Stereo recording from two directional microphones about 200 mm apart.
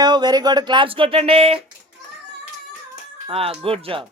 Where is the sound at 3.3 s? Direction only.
30° right (ahead or behind).